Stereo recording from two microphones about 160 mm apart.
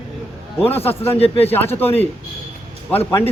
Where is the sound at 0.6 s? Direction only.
40° left (ahead or behind).